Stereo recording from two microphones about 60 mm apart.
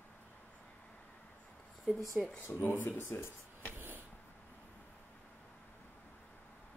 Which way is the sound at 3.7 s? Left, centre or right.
Right.